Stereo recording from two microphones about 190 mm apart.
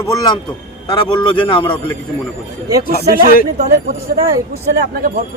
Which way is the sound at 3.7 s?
50° right (ahead or behind).